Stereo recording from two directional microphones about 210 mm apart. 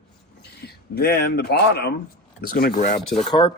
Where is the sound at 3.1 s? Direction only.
20° left (ahead or behind).